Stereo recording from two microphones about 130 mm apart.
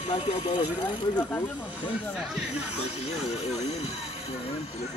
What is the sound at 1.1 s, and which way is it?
Speech, 10° left (ahead or behind).